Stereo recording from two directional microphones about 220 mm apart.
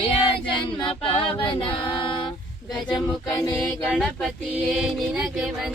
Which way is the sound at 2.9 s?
15° left (ahead or behind).